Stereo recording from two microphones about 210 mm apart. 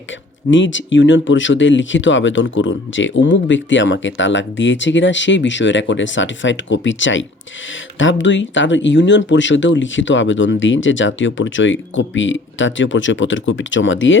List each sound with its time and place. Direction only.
0.5 s speech: 65° left (ahead or behind)